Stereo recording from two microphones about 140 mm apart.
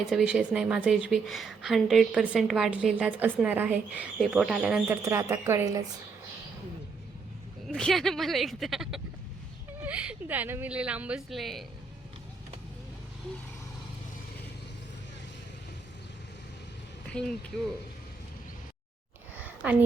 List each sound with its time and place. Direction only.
0.1 s a woman's voice: 5° right (ahead or behind)
4.9 s a woman's voice: 20° right (ahead or behind)
7.7 s a woman's voice: 5° left (ahead or behind)
17.1 s speech: 5° left (ahead or behind)
19.6 s a woman's voice: 10° right (ahead or behind)